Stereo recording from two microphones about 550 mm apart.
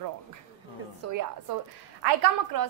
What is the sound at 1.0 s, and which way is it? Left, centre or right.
Speech, right.